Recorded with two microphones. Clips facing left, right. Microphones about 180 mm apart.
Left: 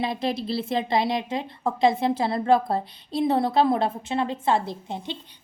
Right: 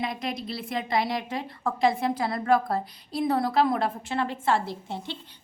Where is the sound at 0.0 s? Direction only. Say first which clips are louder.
Left 5 dB; 30° left (ahead or behind).